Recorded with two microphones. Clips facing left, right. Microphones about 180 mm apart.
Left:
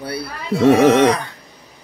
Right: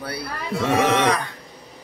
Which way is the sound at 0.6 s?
45° left (ahead or behind).